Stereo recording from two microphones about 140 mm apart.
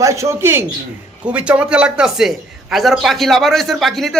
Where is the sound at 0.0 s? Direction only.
20° right (ahead or behind).